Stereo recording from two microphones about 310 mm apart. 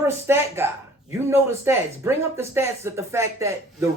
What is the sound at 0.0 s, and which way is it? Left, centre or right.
Speech, centre.